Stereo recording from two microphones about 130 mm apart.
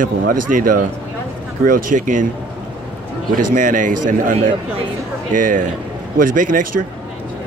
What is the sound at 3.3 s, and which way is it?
Speech, 85° right.